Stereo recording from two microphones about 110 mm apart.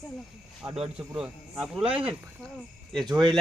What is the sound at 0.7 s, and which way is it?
Speech, 55° right (ahead or behind).